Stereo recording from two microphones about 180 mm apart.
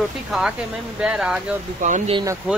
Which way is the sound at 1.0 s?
5° right (ahead or behind).